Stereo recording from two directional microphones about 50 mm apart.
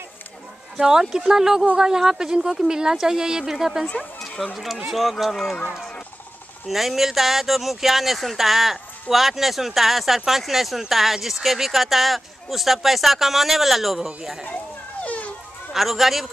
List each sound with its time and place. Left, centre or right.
0.7 s speech: centre
6.7 s speech: centre
14.4 s a sound: left
15.7 s speech: centre